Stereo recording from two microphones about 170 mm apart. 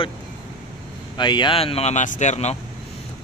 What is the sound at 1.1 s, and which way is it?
Speech, 25° left (ahead or behind).